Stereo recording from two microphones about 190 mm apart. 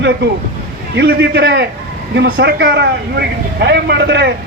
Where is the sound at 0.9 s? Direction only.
65° right (ahead or behind).